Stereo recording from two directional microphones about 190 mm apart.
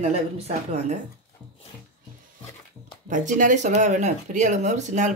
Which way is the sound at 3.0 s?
40° right (ahead or behind).